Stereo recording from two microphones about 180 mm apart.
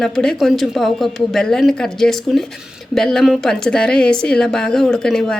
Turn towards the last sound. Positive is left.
turn(degrees=5)  # may be behind; listen again after turning